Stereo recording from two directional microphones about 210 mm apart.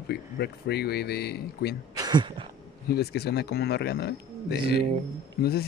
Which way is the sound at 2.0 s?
20° right (ahead or behind).